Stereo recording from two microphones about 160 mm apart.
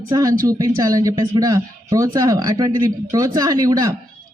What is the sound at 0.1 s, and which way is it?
Speech, 20° right (ahead or behind).